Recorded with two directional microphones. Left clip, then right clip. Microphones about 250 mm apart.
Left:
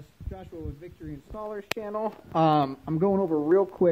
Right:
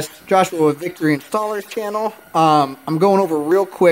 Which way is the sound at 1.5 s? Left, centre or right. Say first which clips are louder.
Right 10 dB; centre.